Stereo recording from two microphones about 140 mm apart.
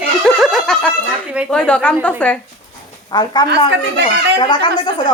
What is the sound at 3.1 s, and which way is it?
Speech, 30° left (ahead or behind).